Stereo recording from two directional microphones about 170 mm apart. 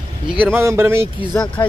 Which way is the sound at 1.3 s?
25° left (ahead or behind).